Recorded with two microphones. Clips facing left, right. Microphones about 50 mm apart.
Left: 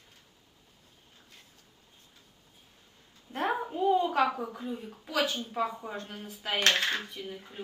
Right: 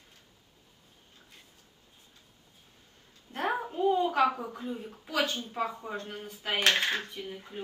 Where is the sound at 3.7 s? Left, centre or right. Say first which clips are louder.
Even; centre.